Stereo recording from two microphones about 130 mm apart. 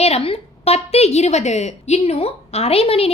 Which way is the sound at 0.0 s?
55° left (ahead or behind).